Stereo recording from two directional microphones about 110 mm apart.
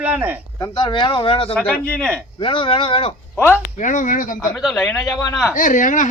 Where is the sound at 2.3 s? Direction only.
50° left (ahead or behind).